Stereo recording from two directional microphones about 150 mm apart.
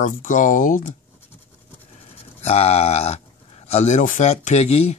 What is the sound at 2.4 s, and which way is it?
Speech, 45° left (ahead or behind).